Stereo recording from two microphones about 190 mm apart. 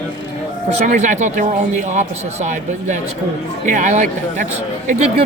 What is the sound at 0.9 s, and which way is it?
A man's voice, 40° right (ahead or behind).